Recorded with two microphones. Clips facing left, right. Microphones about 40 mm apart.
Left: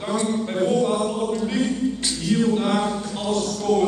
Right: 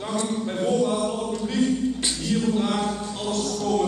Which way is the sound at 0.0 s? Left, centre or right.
Centre.